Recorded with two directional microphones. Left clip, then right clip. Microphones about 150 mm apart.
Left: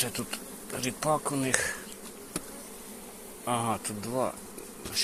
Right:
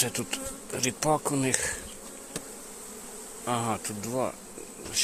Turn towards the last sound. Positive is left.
turn(degrees=-45)  # may be behind; listen again after turning